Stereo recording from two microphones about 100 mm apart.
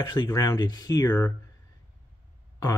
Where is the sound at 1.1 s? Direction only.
15° left (ahead or behind).